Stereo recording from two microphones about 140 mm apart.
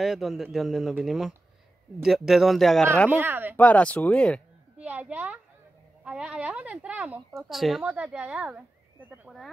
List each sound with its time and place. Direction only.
0.0 s a man's voice: centre (ahead or behind)
3.1 s speech: 15° right (ahead or behind)
3.5 s speech: 10° left (ahead or behind)
4.7 s a woman's voice: 10° right (ahead or behind)